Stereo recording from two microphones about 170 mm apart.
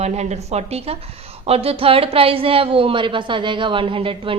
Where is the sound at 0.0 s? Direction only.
40° right (ahead or behind).